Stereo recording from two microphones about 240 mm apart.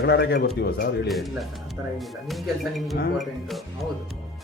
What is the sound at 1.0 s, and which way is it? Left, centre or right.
Speech, centre.